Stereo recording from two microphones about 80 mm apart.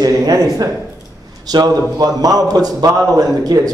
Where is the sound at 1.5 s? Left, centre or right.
Right.